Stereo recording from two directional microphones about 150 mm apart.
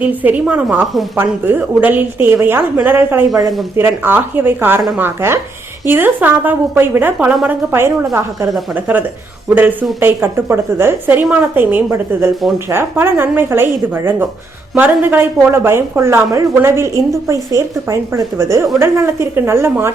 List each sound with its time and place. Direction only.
0.0 s speech: 10° right (ahead or behind)